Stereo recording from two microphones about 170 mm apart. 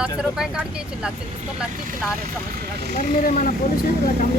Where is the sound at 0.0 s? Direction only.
5° right (ahead or behind).